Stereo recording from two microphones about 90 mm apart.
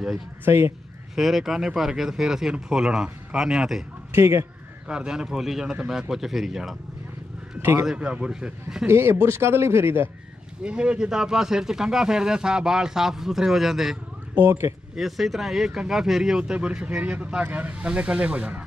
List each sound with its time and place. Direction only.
0.5 s speech: 30° right (ahead or behind)
1.1 s speech: 5° right (ahead or behind)
4.1 s speech: 25° right (ahead or behind)
4.8 s speech: 10° right (ahead or behind)
7.8 s speech: 10° right (ahead or behind)
8.8 s speech: 30° right (ahead or behind)
10.6 s speech: 10° right (ahead or behind)
14.3 s speech: 25° right (ahead or behind)
15.0 s speech: centre (ahead or behind)